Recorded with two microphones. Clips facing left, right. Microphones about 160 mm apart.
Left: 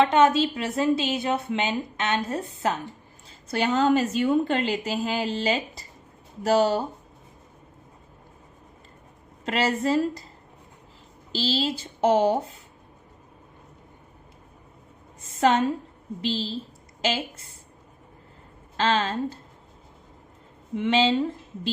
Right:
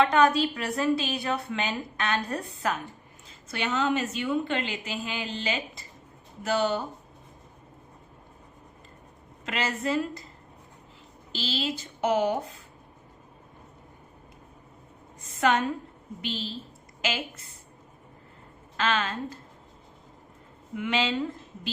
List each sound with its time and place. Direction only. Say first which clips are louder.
0.0 s a woman's voice: left 3 dB; 25° left (ahead or behind)
3.2 s a woman's voice: left 6 dB; 35° left (ahead or behind)
9.5 s a woman's voice: left 5 dB; 35° left (ahead or behind)
11.3 s a woman's voice: left 5 dB; 35° left (ahead or behind)
15.4 s a woman's voice: left 4 dB; 30° left (ahead or behind)
18.8 s a woman's voice: left 4 dB; 30° left (ahead or behind)
20.7 s a woman's voice: left 6 dB; 30° left (ahead or behind)